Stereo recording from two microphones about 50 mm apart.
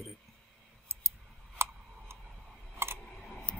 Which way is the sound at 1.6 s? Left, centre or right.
Right.